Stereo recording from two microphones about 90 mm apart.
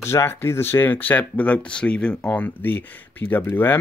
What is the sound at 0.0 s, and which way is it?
Speech, 30° left (ahead or behind).